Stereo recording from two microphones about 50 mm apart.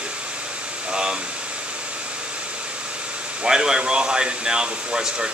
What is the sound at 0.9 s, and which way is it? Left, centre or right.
Speech, centre.